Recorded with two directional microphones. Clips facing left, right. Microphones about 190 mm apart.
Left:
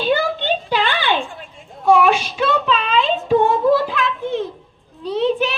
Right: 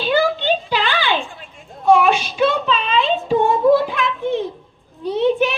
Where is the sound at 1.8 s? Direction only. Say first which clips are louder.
Even; 5° left (ahead or behind).